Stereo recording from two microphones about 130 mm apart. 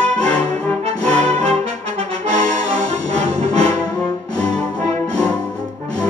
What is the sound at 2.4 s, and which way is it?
Brass instrument, 30° left (ahead or behind).